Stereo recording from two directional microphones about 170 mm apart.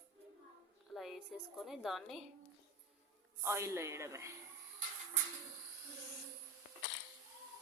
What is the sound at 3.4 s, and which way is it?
Speech, 15° right (ahead or behind).